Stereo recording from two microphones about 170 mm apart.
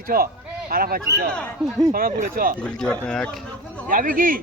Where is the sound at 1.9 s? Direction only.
55° right (ahead or behind).